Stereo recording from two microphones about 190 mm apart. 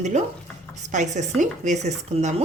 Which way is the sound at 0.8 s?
40° right (ahead or behind).